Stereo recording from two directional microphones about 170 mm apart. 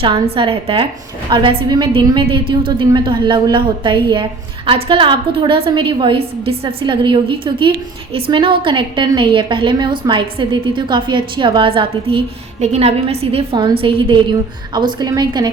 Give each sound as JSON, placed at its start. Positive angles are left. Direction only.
{"t": 0.0, "sound": "a woman's voice", "side_deg": -30}